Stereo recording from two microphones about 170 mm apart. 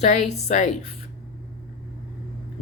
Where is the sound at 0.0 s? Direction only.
45° left (ahead or behind).